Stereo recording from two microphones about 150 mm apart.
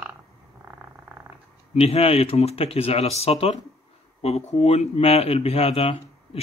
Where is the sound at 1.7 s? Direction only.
45° left (ahead or behind).